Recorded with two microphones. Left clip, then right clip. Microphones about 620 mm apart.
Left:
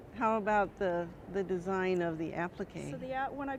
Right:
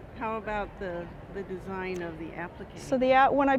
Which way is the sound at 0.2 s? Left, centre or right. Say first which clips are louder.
Left 3 dB; left.